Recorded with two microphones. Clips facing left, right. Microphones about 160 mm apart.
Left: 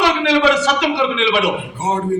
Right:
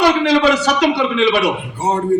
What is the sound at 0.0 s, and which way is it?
A man's voice, 40° right (ahead or behind).